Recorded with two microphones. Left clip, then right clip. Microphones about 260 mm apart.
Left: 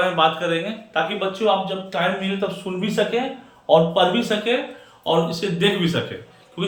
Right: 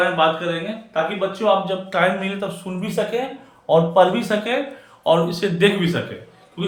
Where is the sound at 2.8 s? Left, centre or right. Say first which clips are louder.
Left 1 dB; right.